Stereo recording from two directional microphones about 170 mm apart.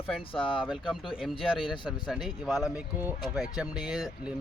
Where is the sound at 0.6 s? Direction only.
Centre (ahead or behind).